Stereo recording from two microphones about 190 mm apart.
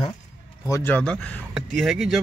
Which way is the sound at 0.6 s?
15° left (ahead or behind).